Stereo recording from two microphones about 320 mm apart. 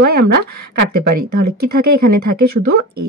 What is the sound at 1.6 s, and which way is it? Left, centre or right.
Speech, right.